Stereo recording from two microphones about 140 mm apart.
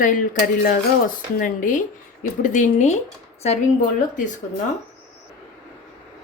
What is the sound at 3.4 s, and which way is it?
Speech, 50° left (ahead or behind).